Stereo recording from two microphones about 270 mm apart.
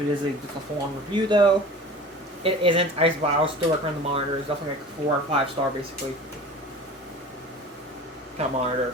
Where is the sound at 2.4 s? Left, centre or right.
Right.